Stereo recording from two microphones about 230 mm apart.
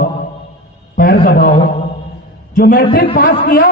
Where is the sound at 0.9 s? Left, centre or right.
Left.